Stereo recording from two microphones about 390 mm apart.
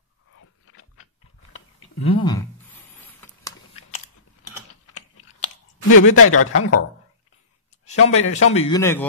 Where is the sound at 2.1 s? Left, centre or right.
Centre.